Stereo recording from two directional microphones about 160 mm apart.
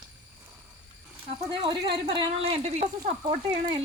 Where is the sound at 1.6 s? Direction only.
30° right (ahead or behind).